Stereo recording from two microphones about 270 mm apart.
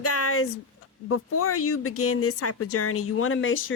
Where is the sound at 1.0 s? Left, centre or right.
Left.